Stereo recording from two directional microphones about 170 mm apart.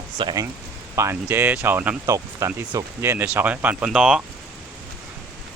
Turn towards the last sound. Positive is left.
turn(degrees=-5)  # may be behind; listen again after turning